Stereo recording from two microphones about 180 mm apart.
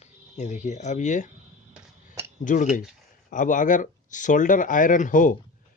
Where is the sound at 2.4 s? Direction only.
45° left (ahead or behind).